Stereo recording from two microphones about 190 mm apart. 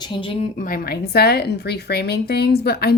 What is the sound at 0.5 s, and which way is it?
A woman's voice, 45° left (ahead or behind).